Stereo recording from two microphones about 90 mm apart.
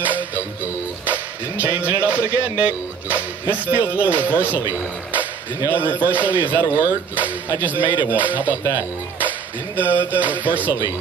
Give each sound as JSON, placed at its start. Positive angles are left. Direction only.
{"t": 0.0, "sound": "music", "side_deg": -20}
{"t": 2.0, "sound": "speech", "side_deg": -15}
{"t": 9.8, "sound": "speech", "side_deg": -20}